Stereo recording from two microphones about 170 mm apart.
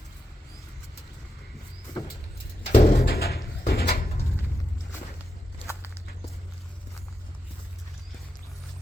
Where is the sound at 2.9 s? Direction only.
65° left (ahead or behind).